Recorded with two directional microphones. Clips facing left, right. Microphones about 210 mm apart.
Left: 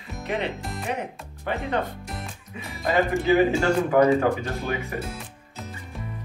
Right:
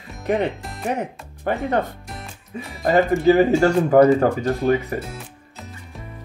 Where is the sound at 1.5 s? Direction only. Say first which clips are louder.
Right 5 dB; 45° right (ahead or behind).